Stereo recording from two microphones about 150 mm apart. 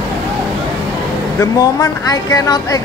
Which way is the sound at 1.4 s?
20° left (ahead or behind).